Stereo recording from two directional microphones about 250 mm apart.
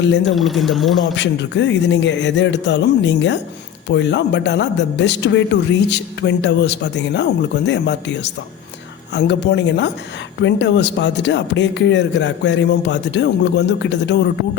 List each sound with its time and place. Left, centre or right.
0.3 s speech: centre
1.1 s speech: left